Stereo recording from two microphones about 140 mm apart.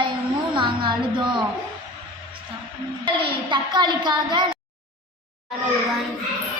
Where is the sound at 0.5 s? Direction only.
35° right (ahead or behind).